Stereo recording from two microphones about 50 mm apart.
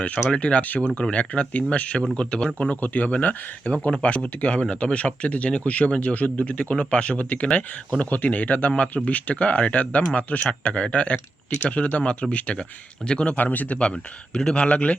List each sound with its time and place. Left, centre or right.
0.0 s a man's voice: left
2.6 s a man's voice: left
13.3 s a man's voice: left
13.8 s a man's voice: centre